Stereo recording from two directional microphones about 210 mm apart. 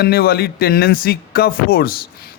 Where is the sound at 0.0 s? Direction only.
45° left (ahead or behind).